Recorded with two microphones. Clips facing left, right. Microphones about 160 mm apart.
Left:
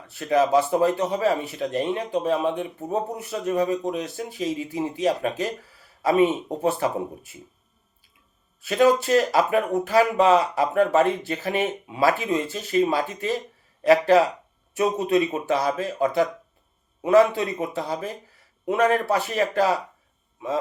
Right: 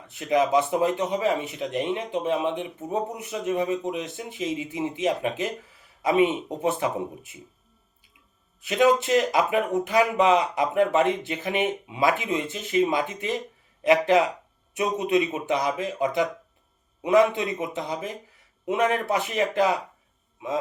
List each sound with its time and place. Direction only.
0.1 s speech: 20° right (ahead or behind)
8.6 s speech: 20° right (ahead or behind)